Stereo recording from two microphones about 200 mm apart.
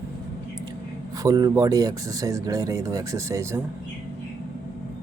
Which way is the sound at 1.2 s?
20° right (ahead or behind).